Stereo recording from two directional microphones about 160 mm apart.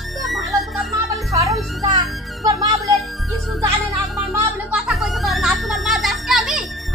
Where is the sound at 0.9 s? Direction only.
20° right (ahead or behind).